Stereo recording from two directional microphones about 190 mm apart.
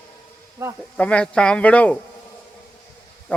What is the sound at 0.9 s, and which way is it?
A man's voice, 5° left (ahead or behind).